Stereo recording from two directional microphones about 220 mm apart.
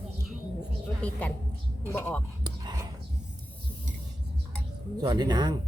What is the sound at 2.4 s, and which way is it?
Whispering, 20° right (ahead or behind).